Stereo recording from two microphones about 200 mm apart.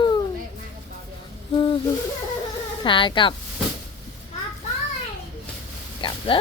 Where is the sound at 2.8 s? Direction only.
25° left (ahead or behind).